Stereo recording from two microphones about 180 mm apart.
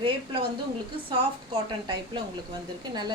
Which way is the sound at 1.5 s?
25° right (ahead or behind).